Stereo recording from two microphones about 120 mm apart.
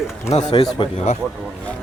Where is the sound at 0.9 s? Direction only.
70° left (ahead or behind).